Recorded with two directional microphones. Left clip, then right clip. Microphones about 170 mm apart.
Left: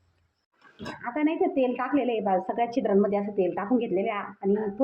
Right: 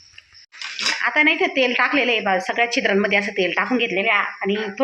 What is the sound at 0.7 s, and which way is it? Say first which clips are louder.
Speech: right 14 dB; 5° left (ahead or behind).